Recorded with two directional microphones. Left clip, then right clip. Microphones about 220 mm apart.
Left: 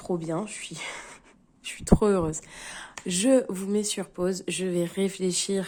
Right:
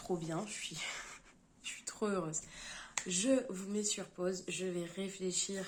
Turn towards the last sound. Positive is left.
turn(degrees=50)  # may be behind; listen again after turning